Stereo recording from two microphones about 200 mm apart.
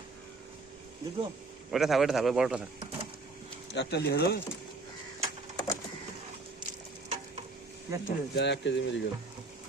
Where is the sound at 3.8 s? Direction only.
55° left (ahead or behind).